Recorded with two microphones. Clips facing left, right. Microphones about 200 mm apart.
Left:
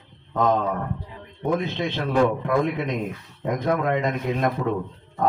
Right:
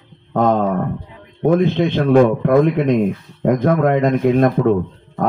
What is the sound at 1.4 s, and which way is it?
A man's voice, 60° right (ahead or behind).